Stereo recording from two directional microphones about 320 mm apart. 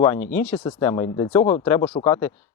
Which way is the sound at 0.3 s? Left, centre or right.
Centre.